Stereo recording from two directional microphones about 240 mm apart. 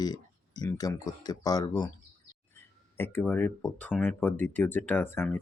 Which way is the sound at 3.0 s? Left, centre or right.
Centre.